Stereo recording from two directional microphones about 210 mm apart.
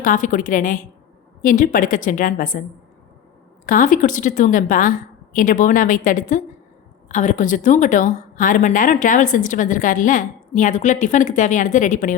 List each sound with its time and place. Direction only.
0.0 s a woman's voice: 40° left (ahead or behind)
3.7 s a woman's voice: 40° left (ahead or behind)